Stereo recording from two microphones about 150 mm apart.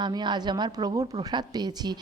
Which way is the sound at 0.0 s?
30° right (ahead or behind).